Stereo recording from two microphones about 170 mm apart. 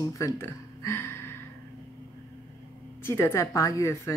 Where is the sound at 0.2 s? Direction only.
15° left (ahead or behind).